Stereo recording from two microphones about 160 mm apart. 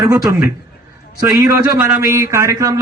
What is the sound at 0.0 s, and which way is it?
Speech, 20° right (ahead or behind).